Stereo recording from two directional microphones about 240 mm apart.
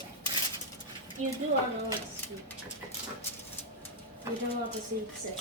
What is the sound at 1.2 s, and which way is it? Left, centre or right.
Speech, right.